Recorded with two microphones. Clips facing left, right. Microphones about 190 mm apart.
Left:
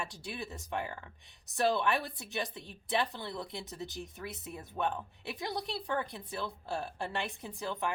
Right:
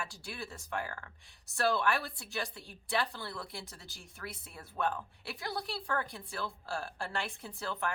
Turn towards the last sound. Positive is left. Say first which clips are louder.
# left 2 dB
turn(degrees=15)  # may be behind; listen again after turning